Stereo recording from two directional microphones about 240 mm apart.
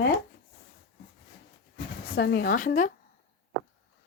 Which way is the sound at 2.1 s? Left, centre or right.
Left.